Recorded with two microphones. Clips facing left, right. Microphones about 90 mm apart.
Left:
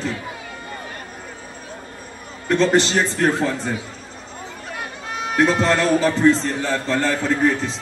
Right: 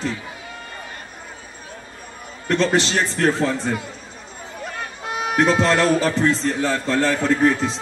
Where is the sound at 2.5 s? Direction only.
5° left (ahead or behind).